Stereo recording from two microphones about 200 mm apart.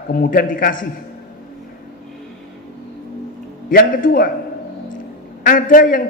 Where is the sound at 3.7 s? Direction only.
45° left (ahead or behind).